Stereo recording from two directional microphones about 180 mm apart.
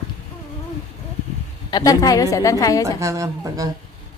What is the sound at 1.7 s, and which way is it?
A woman's voice, 20° left (ahead or behind).